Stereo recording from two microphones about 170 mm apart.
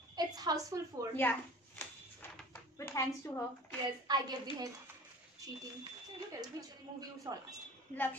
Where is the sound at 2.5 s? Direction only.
15° left (ahead or behind).